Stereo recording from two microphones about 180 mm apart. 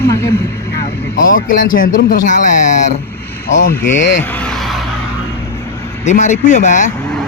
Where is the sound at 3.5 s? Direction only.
90° left.